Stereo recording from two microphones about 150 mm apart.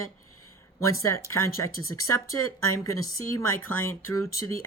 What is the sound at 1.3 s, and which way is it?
Speech, 20° left (ahead or behind).